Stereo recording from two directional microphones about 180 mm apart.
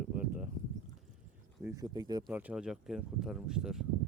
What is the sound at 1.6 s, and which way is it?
Speech, 20° right (ahead or behind).